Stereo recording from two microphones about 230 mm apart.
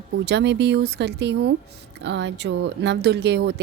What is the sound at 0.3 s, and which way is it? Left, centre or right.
Speech, right.